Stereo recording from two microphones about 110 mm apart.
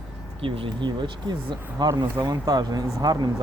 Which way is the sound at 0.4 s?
55° right (ahead or behind).